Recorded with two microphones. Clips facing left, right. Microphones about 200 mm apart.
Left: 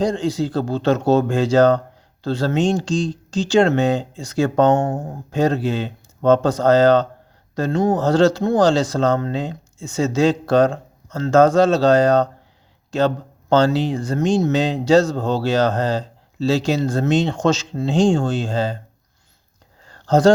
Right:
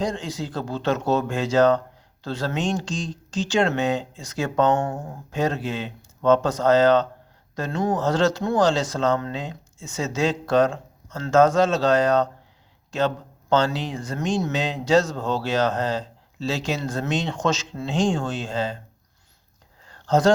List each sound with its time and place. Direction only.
0.0 s speech: 30° left (ahead or behind)
4.9 s speech: 45° left (ahead or behind)
19.8 s a sound: 35° left (ahead or behind)